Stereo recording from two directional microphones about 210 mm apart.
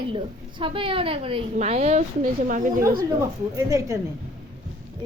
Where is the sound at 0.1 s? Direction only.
25° right (ahead or behind).